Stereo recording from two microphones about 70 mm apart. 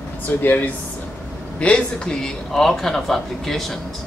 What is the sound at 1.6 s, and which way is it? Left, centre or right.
Speech, centre.